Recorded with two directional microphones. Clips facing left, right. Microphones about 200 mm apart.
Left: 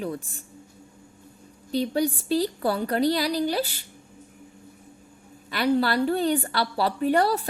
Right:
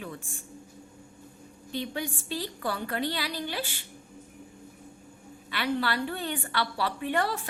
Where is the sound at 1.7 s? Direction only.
40° left (ahead or behind).